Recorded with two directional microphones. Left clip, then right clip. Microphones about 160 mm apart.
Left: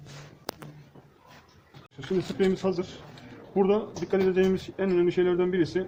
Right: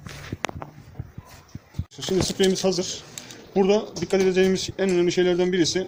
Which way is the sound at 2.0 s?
40° right (ahead or behind).